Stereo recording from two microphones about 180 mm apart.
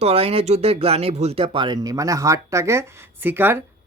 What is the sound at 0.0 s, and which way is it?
Speech, 35° right (ahead or behind).